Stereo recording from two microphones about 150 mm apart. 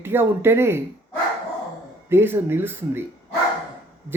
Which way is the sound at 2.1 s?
15° right (ahead or behind).